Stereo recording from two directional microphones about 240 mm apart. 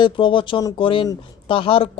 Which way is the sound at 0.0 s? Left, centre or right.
Left.